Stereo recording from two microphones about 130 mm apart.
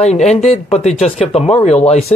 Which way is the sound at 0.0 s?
60° left (ahead or behind).